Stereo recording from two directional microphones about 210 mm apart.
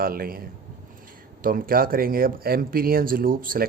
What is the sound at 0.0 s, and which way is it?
Speech, 45° right (ahead or behind).